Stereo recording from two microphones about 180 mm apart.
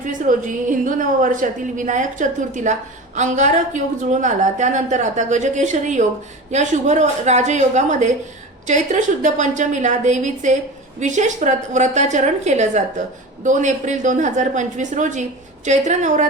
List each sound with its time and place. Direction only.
0.0 s a woman's voice: 45° right (ahead or behind)